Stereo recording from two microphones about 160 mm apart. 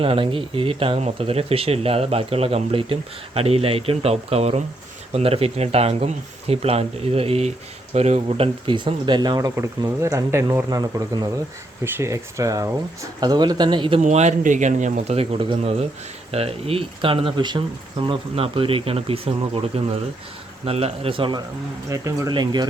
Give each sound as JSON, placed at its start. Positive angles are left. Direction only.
{"t": 0.0, "sound": "speech", "side_deg": -35}
{"t": 14.0, "sound": "speech", "side_deg": -45}
{"t": 21.8, "sound": "speech", "side_deg": -20}